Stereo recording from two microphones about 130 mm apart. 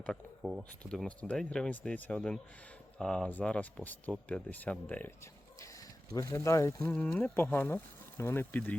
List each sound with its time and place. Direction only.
0.7 s speech: 10° left (ahead or behind)
6.9 s speech: 10° left (ahead or behind)